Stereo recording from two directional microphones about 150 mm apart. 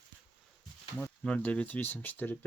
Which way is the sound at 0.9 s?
10° left (ahead or behind).